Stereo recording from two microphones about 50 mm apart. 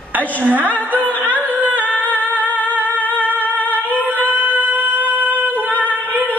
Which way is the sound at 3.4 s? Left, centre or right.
Left.